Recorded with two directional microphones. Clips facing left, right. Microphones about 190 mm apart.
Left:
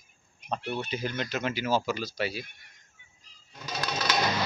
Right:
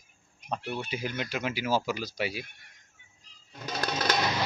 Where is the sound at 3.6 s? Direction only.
50° right (ahead or behind).